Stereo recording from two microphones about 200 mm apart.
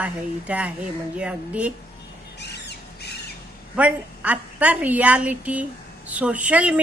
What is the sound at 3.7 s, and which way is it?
A woman's voice, 5° right (ahead or behind).